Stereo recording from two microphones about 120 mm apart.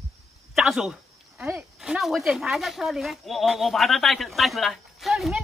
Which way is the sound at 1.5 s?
5° right (ahead or behind).